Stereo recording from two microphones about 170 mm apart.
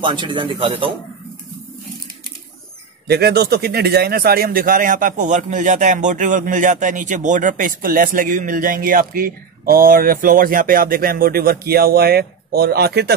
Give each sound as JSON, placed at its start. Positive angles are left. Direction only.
{"t": 0.0, "sound": "speech", "side_deg": -30}
{"t": 3.1, "sound": "speech", "side_deg": -70}